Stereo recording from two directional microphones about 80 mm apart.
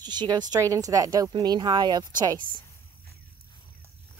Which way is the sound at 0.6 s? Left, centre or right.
Right.